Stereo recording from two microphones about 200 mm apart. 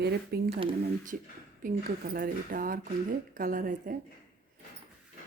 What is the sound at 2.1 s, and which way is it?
Speech, 45° right (ahead or behind).